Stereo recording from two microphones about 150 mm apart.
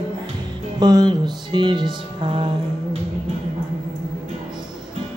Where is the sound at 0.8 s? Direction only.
30° right (ahead or behind).